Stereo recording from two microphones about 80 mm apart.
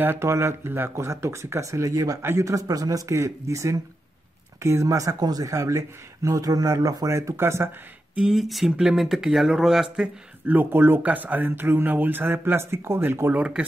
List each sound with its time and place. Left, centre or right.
0.0 s speech: right
8.1 s speech: centre
9.9 s speech: right